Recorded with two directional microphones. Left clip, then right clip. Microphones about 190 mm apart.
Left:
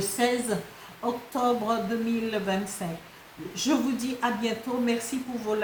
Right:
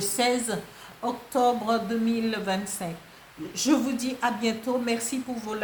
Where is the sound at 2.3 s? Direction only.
50° right (ahead or behind).